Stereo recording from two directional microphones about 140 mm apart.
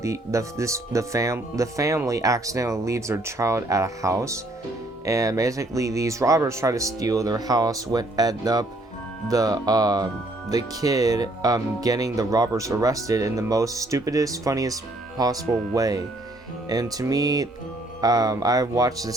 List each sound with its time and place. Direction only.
0.0 s speech: 20° right (ahead or behind)